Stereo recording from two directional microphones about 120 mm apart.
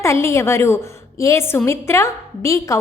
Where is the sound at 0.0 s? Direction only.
25° left (ahead or behind).